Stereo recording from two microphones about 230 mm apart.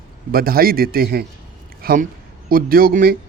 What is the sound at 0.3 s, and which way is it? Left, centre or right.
Speech, right.